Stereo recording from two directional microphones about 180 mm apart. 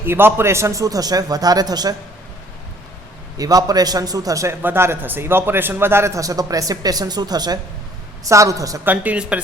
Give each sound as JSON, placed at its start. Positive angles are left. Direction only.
{"t": 0.0, "sound": "a man's voice", "side_deg": -10}
{"t": 3.3, "sound": "a man's voice", "side_deg": -20}